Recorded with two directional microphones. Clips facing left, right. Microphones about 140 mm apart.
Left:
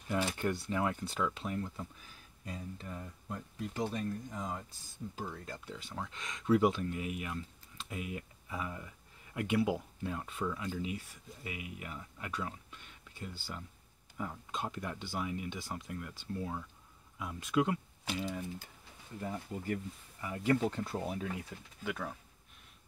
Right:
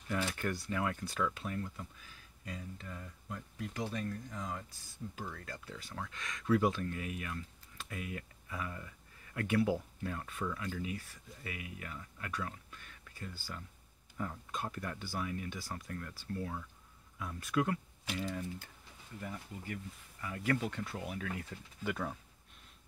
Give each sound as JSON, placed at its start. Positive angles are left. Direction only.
{"t": 0.1, "sound": "speech", "side_deg": 20}
{"t": 14.1, "sound": "speech", "side_deg": 5}
{"t": 14.5, "sound": "speech", "side_deg": 20}
{"t": 20.2, "sound": "speech", "side_deg": 20}
{"t": 21.5, "sound": "speech", "side_deg": 10}
{"t": 21.8, "sound": "speech", "side_deg": -5}